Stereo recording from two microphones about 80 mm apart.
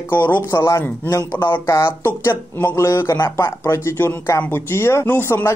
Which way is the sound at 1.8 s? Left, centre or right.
Left.